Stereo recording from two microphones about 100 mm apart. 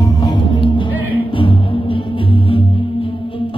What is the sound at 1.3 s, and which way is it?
Music, 60° left (ahead or behind).